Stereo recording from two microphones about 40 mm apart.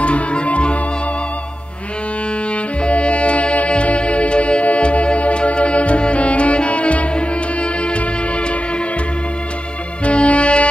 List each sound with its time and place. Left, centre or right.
0.0 s music: left
2.5 s music: left
10.0 s music: left